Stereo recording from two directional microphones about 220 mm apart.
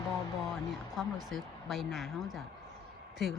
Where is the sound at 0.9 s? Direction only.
Centre (ahead or behind).